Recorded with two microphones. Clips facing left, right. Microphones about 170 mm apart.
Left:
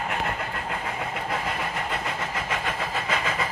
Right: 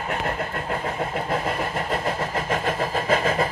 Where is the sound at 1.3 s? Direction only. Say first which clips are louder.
Right 4 dB; 45° right (ahead or behind).